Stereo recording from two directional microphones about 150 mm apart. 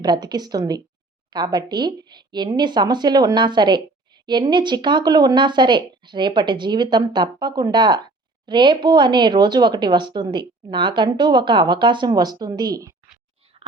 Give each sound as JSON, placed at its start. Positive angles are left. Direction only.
{"t": 0.0, "sound": "speech", "side_deg": -30}